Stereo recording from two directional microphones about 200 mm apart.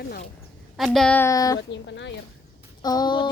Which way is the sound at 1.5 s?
65° left (ahead or behind).